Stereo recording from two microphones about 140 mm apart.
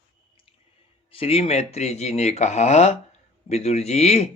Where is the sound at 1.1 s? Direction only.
45° left (ahead or behind).